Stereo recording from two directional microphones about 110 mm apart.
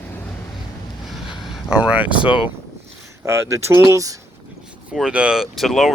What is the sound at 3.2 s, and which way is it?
Speech, 25° right (ahead or behind).